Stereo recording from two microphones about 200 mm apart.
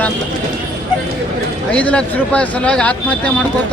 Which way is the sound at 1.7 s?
5° left (ahead or behind).